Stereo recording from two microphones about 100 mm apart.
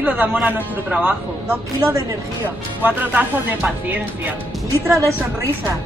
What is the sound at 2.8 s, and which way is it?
Speech, 20° right (ahead or behind).